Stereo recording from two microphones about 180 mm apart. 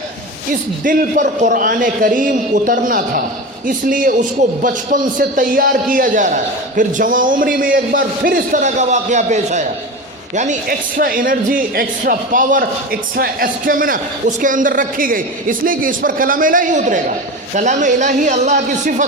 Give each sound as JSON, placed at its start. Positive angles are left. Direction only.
{"t": 0.9, "sound": "speech", "side_deg": -45}